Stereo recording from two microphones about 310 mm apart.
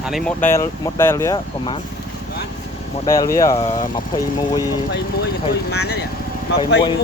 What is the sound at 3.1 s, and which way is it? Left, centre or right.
Speech, centre.